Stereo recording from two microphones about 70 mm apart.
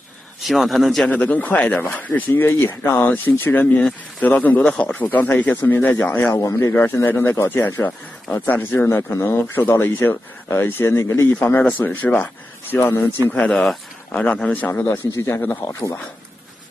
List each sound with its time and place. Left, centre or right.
0.4 s a man's voice: centre
1.0 s speech: left
6.3 s speech: left
7.1 s speech: left
11.2 s speech: left
13.3 s speech: centre
15.1 s speech: left